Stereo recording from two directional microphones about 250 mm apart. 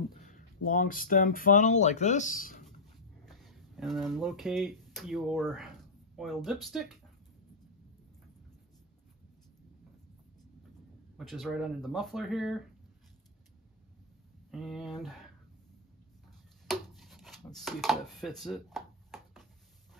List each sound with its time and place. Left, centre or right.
0.2 s speech: left
3.3 s speech: centre
11.1 s speech: centre
14.5 s speech: centre
16.6 s chopping: centre